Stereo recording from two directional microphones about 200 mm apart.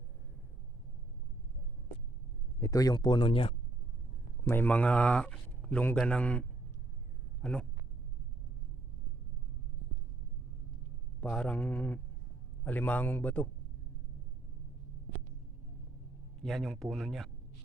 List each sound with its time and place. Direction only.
2.6 s speech: 15° left (ahead or behind)
4.4 s speech: 10° left (ahead or behind)
7.4 s speech: 5° left (ahead or behind)
11.2 s a man's voice: 5° left (ahead or behind)
16.4 s speech: centre (ahead or behind)